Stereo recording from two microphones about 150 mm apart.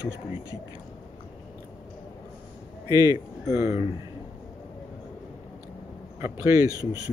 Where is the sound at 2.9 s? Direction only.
25° right (ahead or behind).